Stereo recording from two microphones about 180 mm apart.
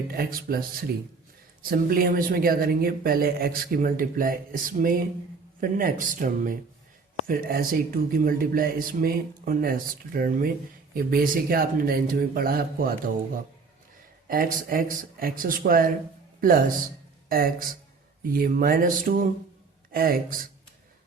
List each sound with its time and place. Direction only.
0.1 s speech: 55° right (ahead or behind)
14.3 s speech: 50° right (ahead or behind)